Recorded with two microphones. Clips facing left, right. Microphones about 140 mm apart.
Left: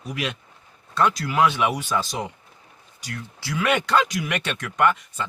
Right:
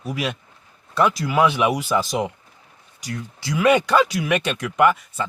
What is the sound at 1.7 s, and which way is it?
Speech, 10° right (ahead or behind).